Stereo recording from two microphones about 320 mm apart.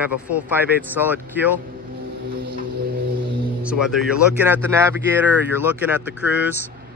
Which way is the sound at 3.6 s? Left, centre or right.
Centre.